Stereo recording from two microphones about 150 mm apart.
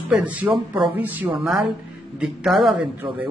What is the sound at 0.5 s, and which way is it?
Speech, 30° right (ahead or behind).